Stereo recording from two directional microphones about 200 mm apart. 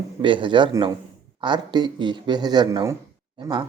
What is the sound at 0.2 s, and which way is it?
Speech, 25° right (ahead or behind).